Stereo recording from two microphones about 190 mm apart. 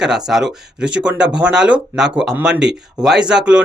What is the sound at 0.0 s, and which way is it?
Speech, 5° right (ahead or behind).